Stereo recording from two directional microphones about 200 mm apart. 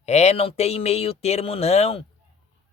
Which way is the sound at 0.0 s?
35° left (ahead or behind).